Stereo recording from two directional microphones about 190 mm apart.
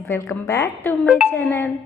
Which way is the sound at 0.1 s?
15° left (ahead or behind).